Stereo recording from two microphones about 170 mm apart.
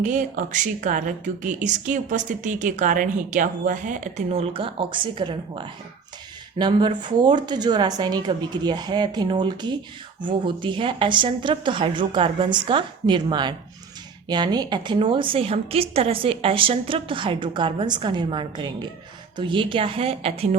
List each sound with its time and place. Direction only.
0.0 s a woman's voice: 45° right (ahead or behind)